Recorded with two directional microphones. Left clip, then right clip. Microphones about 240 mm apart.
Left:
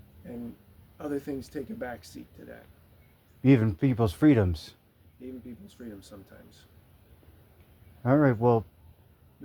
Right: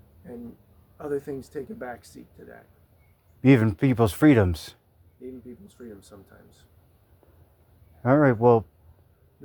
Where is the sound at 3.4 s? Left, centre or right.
Right.